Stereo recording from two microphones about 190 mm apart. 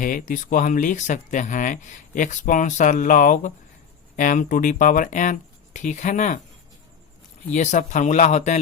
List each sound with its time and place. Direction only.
0.0 s speech: 45° left (ahead or behind)
7.5 s speech: 40° left (ahead or behind)